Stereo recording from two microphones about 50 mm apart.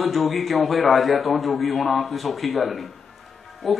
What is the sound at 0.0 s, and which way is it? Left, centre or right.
A man's voice, centre.